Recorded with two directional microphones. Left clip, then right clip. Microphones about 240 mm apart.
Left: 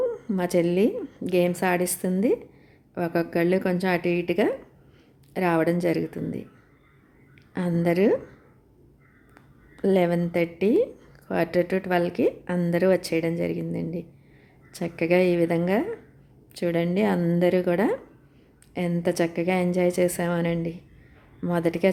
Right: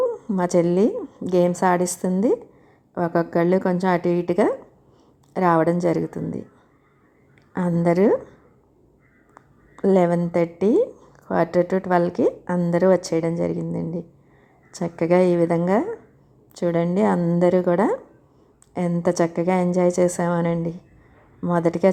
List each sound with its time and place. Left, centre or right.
0.2 s a woman's voice: centre
7.5 s a woman's voice: centre
9.3 s a woman's voice: centre